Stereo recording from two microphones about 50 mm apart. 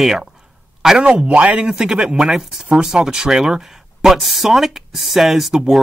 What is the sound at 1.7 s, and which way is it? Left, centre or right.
Speech, centre.